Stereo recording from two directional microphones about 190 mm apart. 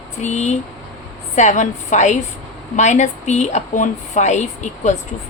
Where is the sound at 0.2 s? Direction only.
40° left (ahead or behind).